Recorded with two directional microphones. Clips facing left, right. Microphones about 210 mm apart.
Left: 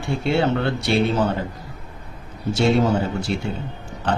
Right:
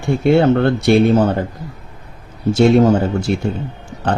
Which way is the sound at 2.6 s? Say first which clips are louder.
Right 7 dB; 50° right (ahead or behind).